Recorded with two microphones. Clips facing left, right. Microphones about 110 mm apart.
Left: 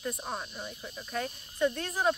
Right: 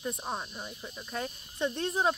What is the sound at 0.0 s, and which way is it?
Speech, 15° right (ahead or behind).